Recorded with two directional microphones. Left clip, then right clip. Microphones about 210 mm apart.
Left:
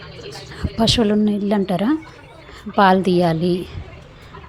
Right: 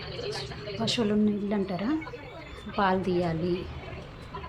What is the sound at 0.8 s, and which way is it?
A woman's voice, 35° left (ahead or behind).